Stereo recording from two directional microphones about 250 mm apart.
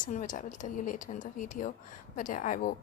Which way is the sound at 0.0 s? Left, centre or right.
Left.